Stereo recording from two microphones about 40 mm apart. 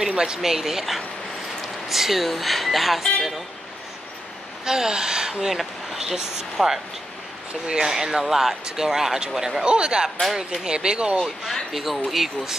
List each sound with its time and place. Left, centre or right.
0.2 s speech: centre
4.6 s speech: centre
5.5 s speech: centre; by 11.1 s right
11.7 s speech: centre